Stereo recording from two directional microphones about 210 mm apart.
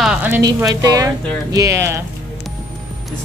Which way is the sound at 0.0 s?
10° right (ahead or behind).